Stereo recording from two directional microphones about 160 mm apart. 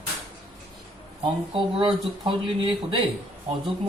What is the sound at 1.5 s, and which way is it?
Speech, 30° right (ahead or behind).